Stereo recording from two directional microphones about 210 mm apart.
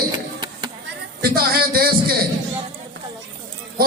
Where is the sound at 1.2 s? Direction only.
45° right (ahead or behind).